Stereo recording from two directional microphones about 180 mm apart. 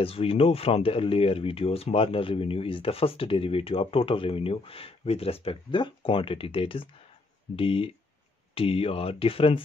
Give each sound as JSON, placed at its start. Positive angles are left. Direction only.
{"t": 0.0, "sound": "speech", "side_deg": 30}